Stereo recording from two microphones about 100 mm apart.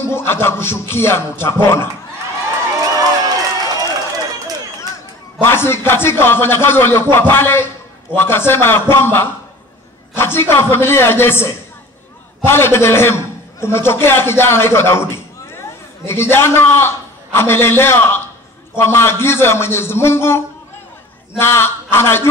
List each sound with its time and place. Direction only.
0.0 s a man's voice: 25° left (ahead or behind)
2.8 s run: 40° right (ahead or behind)
5.4 s a man's voice: 25° left (ahead or behind)
16.1 s a man's voice: 25° left (ahead or behind)